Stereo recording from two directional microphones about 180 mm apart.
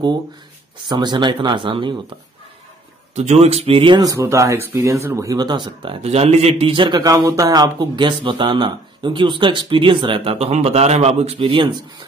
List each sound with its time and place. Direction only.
0.8 s speech: 25° right (ahead or behind)
3.2 s speech: 35° right (ahead or behind)